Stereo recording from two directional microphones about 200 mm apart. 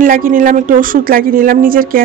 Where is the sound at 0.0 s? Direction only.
45° right (ahead or behind).